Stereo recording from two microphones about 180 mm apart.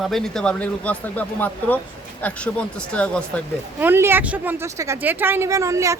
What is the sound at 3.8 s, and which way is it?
Speech, 10° right (ahead or behind).